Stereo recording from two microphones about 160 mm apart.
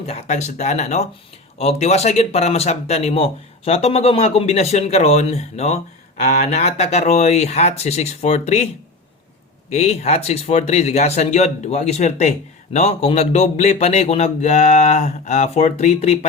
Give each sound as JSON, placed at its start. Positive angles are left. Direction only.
{"t": 0.0, "sound": "speech", "side_deg": 45}
{"t": 9.6, "sound": "speech", "side_deg": 40}